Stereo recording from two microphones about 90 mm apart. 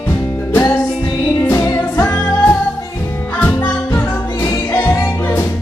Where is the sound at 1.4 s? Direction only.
25° left (ahead or behind).